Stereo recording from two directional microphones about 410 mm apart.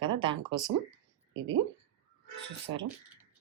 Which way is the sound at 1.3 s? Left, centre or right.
Right.